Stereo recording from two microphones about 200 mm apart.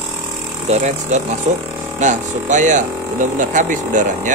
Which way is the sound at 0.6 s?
35° right (ahead or behind).